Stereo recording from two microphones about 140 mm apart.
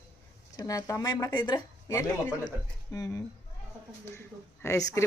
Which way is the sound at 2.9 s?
20° left (ahead or behind).